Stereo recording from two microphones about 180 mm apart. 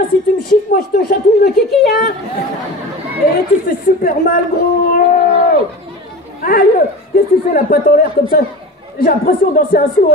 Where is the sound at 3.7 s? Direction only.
50° left (ahead or behind).